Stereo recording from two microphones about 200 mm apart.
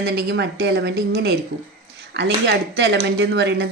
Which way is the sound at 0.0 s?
55° right (ahead or behind).